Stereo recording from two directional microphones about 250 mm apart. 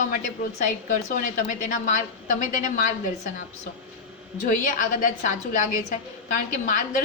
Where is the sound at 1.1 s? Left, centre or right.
Left.